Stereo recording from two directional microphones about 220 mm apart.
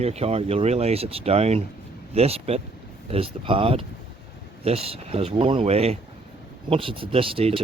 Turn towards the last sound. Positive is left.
turn(degrees=-25)  # may be behind; listen again after turning